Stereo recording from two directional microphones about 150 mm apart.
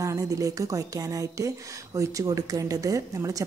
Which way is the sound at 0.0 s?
20° right (ahead or behind).